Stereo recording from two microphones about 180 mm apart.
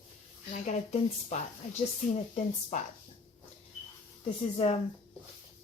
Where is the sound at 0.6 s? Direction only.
40° left (ahead or behind).